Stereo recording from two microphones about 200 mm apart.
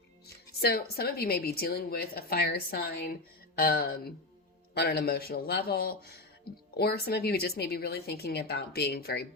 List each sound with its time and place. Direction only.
0.6 s a woman's voice: 50° left (ahead or behind)